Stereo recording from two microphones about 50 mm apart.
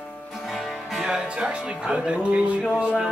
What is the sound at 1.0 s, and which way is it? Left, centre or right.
Speech, centre.